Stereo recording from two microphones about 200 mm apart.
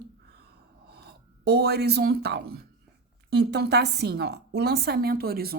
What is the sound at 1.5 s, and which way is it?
A woman's voice, 55° right (ahead or behind).